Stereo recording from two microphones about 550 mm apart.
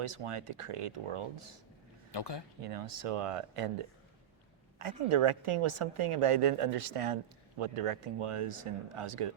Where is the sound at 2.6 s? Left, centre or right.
Right.